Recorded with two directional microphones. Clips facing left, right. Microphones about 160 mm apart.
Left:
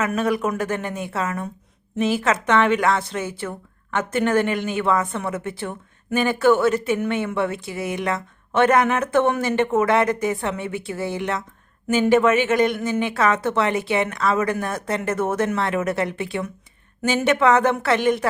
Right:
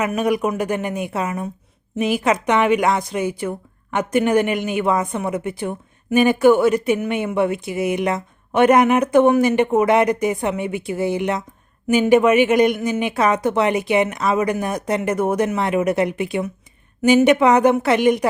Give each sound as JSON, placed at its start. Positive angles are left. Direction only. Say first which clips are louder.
{"t": 0.0, "sound": "a man's voice", "louder": "right 2 dB", "side_deg": -15}